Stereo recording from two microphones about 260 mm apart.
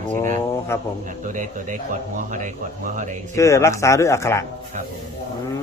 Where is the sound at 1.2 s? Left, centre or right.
Right.